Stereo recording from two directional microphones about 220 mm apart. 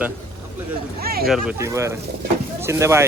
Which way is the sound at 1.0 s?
45° right (ahead or behind).